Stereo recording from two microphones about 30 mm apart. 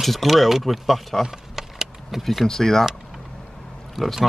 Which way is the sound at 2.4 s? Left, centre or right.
Centre.